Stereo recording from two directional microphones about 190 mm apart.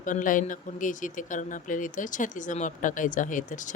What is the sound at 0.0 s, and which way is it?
Speech, 45° left (ahead or behind).